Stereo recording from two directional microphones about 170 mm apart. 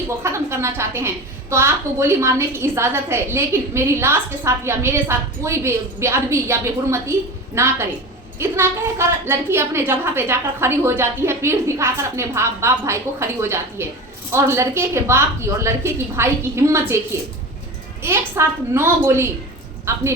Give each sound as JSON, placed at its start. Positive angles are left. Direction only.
{"t": 0.2, "sound": "a woman's voice", "side_deg": -15}
{"t": 18.0, "sound": "a woman's voice", "side_deg": -15}